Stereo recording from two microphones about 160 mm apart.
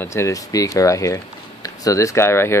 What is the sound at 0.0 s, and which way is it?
Speech, 15° left (ahead or behind).